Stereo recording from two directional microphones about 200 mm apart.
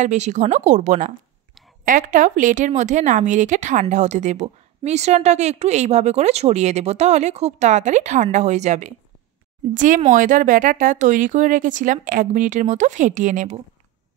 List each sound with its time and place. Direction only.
0.0 s a woman's voice: 35° right (ahead or behind)